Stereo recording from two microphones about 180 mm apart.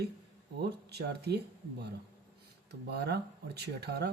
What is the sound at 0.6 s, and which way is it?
Speech, 65° right (ahead or behind).